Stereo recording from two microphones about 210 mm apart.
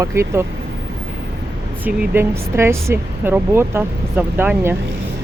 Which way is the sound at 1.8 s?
10° right (ahead or behind).